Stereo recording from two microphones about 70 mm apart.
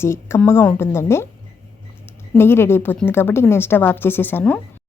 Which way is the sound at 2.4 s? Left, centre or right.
Left.